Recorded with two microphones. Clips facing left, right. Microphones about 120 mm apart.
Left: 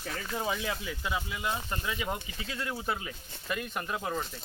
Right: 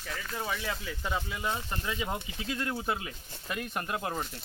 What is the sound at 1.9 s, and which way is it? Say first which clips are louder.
Speech: even; 10° right (ahead or behind).